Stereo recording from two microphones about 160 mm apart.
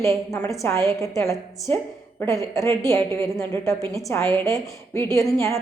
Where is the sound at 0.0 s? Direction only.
20° left (ahead or behind).